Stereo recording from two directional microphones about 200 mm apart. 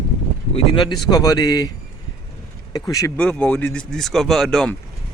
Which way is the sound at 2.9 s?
15° left (ahead or behind).